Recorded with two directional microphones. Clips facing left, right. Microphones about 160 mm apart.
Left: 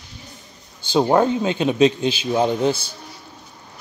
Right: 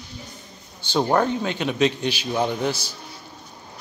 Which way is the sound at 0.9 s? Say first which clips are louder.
Left 4 dB; 20° left (ahead or behind).